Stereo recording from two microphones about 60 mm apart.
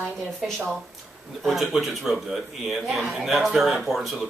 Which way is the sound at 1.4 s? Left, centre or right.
Centre.